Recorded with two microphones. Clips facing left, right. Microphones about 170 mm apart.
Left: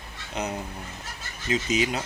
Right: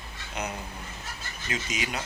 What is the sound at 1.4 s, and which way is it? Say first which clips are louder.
Speech: left 8 dB; 25° left (ahead or behind).